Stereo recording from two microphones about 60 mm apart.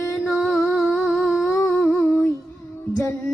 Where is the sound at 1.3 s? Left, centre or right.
Centre.